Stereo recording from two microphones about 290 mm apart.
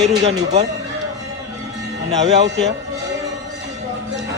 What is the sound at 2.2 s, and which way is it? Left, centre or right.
Speech, right.